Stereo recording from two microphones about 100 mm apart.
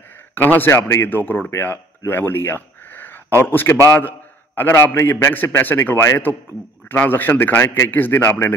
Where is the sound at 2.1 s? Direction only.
20° left (ahead or behind).